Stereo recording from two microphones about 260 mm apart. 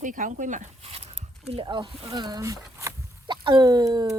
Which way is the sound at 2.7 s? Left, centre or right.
Centre.